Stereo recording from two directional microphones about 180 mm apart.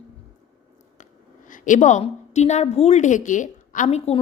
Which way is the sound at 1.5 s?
45° left (ahead or behind).